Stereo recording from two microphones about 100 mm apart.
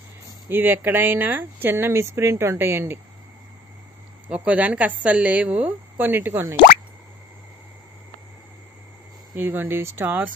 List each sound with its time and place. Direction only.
0.5 s speech: 20° right (ahead or behind)
4.3 s a woman's voice: 15° right (ahead or behind)
9.4 s speech: 20° right (ahead or behind)